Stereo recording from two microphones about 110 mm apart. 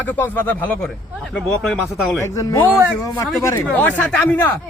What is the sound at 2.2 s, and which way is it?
A man's voice, 25° left (ahead or behind).